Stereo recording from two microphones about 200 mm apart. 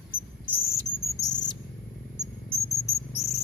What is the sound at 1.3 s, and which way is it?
Bird, 20° left (ahead or behind).